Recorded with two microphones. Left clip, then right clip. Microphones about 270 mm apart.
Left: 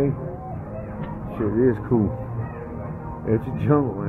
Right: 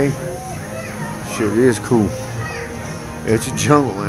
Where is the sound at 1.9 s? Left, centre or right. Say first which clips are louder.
Right 6 dB; right.